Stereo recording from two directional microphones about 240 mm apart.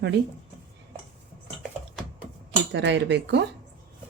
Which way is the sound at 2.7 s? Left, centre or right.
Right.